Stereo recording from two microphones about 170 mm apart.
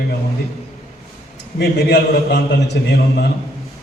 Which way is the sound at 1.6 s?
65° left (ahead or behind).